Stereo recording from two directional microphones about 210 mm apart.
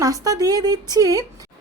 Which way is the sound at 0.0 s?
15° right (ahead or behind).